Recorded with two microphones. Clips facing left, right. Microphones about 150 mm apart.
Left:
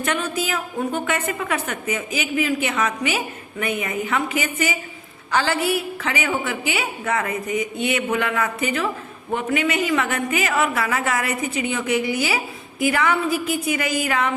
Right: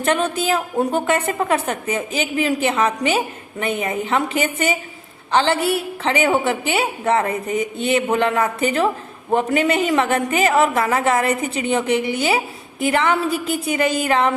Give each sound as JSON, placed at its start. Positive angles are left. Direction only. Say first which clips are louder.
{"t": 0.0, "sound": "a woman's voice", "louder": "right 5 dB", "side_deg": -30}